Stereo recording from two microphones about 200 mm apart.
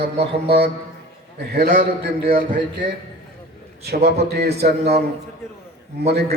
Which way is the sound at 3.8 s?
55° right (ahead or behind).